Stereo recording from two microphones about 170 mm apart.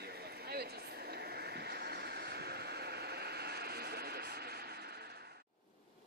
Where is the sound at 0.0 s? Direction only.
70° right (ahead or behind).